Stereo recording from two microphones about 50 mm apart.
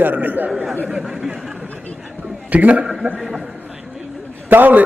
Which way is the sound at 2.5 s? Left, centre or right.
Right.